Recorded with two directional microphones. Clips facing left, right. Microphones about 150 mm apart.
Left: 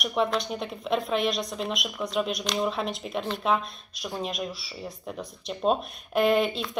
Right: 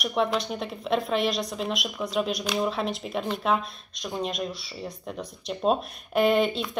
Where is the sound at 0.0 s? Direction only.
Centre (ahead or behind).